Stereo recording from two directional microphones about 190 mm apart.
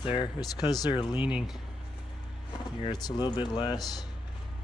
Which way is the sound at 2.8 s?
20° left (ahead or behind).